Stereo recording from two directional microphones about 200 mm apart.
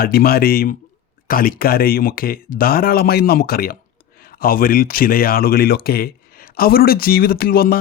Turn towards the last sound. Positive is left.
turn(degrees=50)  # may be behind; listen again after turning